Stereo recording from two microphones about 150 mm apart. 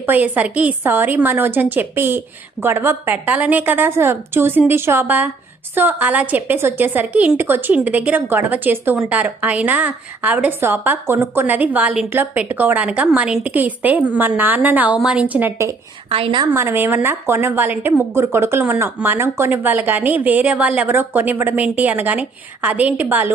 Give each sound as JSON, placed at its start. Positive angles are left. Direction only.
{"t": 0.0, "sound": "a woman's voice", "side_deg": -10}
{"t": 16.0, "sound": "a woman's voice", "side_deg": -40}
{"t": 16.6, "sound": "a woman's voice", "side_deg": -15}